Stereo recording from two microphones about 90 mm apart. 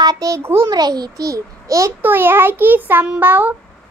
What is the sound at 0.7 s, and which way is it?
A child's voice, 50° right (ahead or behind).